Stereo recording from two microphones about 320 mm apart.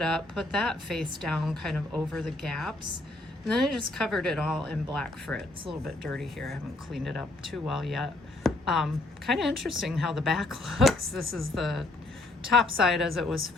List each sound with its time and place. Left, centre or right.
0.0 s speech: centre
11.3 s speech: right
11.5 s speech: centre